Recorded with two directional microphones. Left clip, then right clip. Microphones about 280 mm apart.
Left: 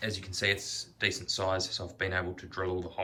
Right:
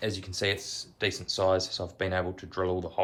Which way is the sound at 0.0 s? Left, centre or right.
Centre.